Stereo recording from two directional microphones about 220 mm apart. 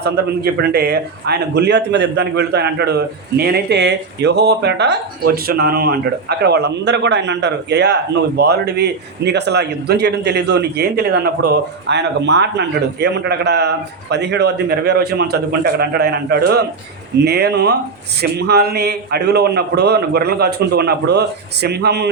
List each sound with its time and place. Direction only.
0.0 s a man's voice: 50° right (ahead or behind)